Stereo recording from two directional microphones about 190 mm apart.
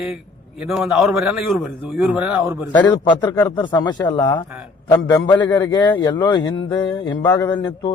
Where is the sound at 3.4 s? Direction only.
15° left (ahead or behind).